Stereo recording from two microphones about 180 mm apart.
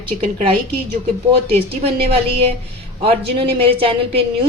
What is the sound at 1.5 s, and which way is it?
A woman's voice, 35° right (ahead or behind).